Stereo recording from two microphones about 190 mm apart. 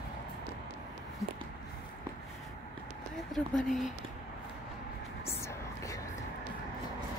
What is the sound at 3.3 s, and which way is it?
Speech, centre (ahead or behind).